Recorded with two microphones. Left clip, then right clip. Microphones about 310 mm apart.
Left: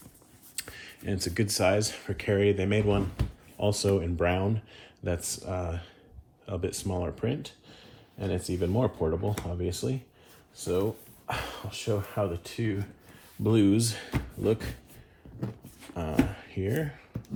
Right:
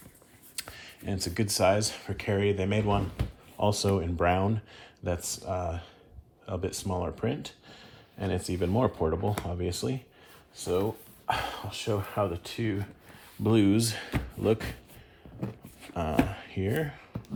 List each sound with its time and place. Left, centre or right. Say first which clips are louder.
0.5 s speech: even; centre
16.0 s speech: right 3 dB; right
16.3 s a sound: even; right